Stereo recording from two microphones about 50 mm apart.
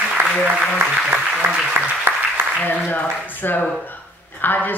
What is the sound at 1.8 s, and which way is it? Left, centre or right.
Speech, right.